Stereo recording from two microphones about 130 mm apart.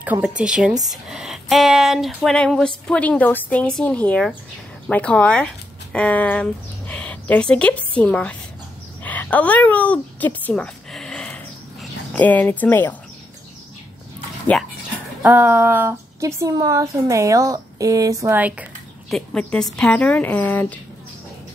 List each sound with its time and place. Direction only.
0.0 s a woman's voice: 10° right (ahead or behind); by 8.4 s 10° left (ahead or behind)
9.0 s a sound: 10° left (ahead or behind)
12.2 s a woman's voice: 10° left (ahead or behind)
15.2 s a woman's voice: 15° right (ahead or behind)
19.0 s a woman's voice: 5° left (ahead or behind)